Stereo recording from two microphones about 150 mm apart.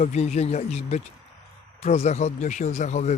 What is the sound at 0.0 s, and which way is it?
Speech, 50° left (ahead or behind).